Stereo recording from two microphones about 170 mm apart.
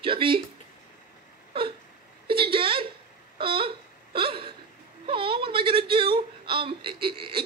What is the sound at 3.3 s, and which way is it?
Hiccup, 30° right (ahead or behind).